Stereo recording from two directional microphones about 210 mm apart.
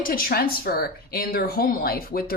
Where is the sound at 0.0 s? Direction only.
45° left (ahead or behind).